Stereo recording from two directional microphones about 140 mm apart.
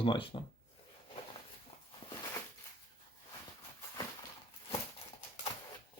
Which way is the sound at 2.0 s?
30° left (ahead or behind).